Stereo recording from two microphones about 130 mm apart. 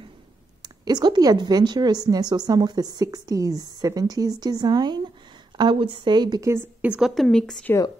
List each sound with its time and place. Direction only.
0.6 s a woman's voice: 30° right (ahead or behind)
6.5 s a woman's voice: 15° right (ahead or behind); by 7.7 s 5° left (ahead or behind)